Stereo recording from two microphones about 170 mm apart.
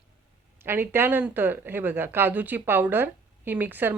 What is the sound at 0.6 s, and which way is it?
A woman's voice, 15° right (ahead or behind).